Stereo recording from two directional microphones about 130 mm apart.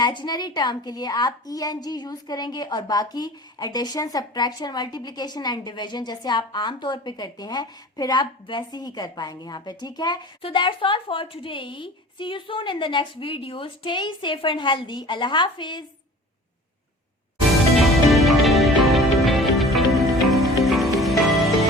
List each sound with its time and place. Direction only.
0.0 s a woman's voice: 35° left (ahead or behind)
17.5 s music: centre (ahead or behind)